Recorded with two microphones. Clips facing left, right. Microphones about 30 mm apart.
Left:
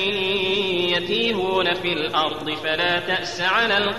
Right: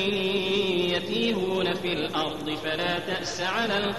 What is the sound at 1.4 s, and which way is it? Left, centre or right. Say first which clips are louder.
Mantra: left 5 dB; left.